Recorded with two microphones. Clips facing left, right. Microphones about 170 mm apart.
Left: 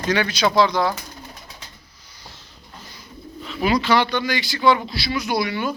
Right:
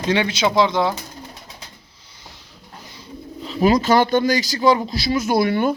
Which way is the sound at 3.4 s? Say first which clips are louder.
Right 4 dB; 35° right (ahead or behind).